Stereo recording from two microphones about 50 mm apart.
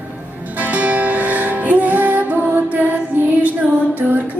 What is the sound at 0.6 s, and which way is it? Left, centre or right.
Music, right.